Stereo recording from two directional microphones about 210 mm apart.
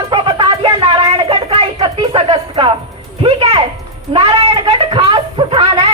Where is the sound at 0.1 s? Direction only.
25° right (ahead or behind).